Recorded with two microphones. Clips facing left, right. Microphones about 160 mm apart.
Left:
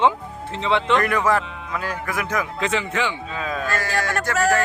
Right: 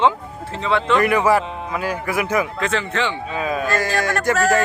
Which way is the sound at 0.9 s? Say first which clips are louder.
Right 6 dB; 10° right (ahead or behind).